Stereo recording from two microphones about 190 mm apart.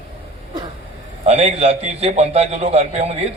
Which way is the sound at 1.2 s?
35° right (ahead or behind).